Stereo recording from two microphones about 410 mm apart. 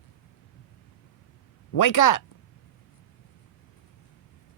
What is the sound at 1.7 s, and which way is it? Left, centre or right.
Speech, left.